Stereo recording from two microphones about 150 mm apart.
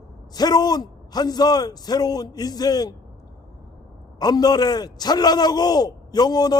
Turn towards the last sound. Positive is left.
turn(degrees=25)  # may be behind; listen again after turning